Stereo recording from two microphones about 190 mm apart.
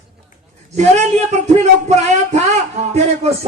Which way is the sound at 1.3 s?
35° right (ahead or behind).